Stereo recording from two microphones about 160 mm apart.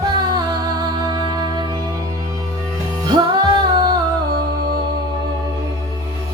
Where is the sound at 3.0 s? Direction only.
25° right (ahead or behind).